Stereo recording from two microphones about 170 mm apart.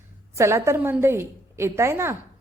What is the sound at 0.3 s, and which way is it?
A woman's voice, 15° right (ahead or behind).